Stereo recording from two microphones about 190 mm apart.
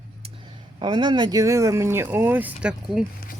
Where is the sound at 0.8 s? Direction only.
25° right (ahead or behind); by 3.0 s 5° right (ahead or behind).